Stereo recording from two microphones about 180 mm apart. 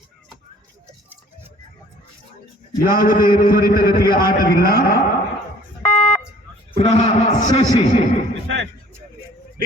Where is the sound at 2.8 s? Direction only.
50° left (ahead or behind).